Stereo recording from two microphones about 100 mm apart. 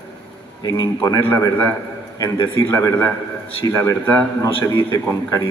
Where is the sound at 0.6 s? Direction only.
45° left (ahead or behind).